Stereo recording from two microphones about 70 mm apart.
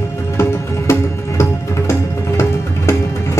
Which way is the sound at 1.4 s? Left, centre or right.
Left.